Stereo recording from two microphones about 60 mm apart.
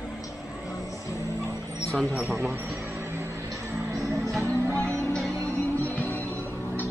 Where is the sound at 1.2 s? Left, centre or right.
Right.